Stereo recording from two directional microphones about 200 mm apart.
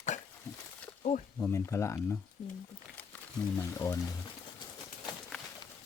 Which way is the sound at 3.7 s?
15° left (ahead or behind).